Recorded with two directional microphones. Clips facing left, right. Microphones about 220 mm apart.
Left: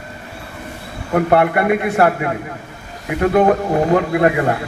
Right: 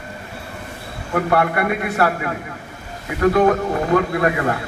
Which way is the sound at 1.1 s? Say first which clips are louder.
Left 4 dB; 25° left (ahead or behind).